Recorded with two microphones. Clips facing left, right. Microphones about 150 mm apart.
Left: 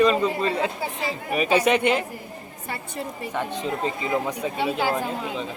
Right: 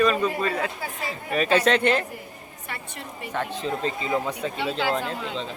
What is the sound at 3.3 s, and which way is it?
A man's voice, 15° left (ahead or behind).